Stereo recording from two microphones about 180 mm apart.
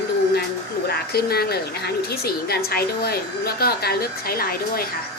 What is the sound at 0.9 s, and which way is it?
A woman's voice, 60° left (ahead or behind).